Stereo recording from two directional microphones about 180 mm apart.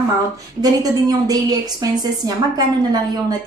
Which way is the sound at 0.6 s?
20° right (ahead or behind).